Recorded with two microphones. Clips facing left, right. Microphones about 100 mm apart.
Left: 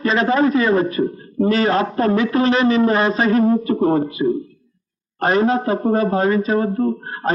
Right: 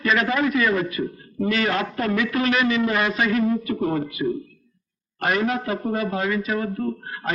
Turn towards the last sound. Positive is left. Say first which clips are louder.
# left 7 dB
turn(degrees=35)  # may be behind; listen again after turning